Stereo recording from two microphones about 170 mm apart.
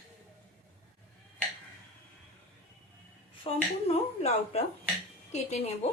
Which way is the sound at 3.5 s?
35° left (ahead or behind).